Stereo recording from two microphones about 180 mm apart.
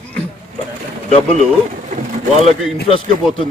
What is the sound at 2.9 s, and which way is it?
Speech, 30° left (ahead or behind).